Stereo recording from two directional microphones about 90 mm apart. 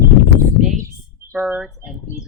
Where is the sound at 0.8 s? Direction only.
30° right (ahead or behind).